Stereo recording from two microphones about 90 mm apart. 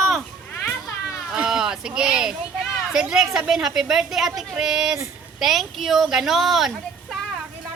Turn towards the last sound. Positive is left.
turn(degrees=-5)  # may be behind; listen again after turning